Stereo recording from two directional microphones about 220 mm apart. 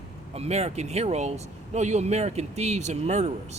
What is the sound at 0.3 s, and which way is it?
Speech, 30° right (ahead or behind).